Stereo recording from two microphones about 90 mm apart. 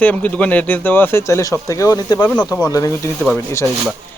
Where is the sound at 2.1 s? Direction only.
20° left (ahead or behind).